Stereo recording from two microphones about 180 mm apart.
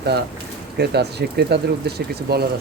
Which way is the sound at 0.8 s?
65° right (ahead or behind).